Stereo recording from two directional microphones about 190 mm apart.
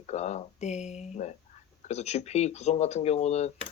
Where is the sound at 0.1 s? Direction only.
35° left (ahead or behind).